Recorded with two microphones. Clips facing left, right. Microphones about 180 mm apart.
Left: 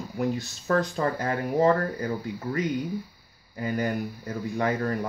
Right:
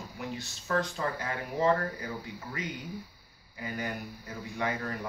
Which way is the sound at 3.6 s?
45° left (ahead or behind).